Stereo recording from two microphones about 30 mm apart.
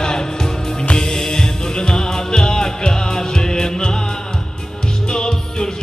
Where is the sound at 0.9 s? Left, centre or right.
Left.